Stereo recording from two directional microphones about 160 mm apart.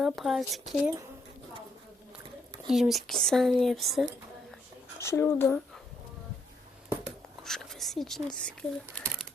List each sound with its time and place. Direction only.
0.0 s speech: centre (ahead or behind)
2.6 s speech: centre (ahead or behind)
4.9 s speech: 15° left (ahead or behind)
7.0 s whispering: centre (ahead or behind)
9.0 s crumpling: 5° left (ahead or behind)